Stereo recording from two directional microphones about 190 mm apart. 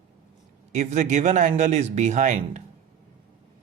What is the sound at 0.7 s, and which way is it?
Speech, 40° right (ahead or behind).